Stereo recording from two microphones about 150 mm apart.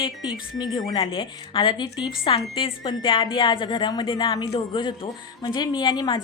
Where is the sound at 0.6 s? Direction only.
30° left (ahead or behind).